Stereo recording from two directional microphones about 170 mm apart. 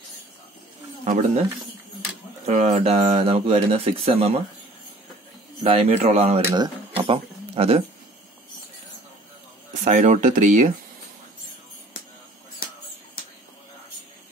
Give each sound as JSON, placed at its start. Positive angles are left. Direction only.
{"t": 1.0, "sound": "speech", "side_deg": -45}
{"t": 2.4, "sound": "speech", "side_deg": -40}
{"t": 5.6, "sound": "speech", "side_deg": -35}
{"t": 6.5, "sound": "a sound", "side_deg": -30}
{"t": 9.8, "sound": "speech", "side_deg": -45}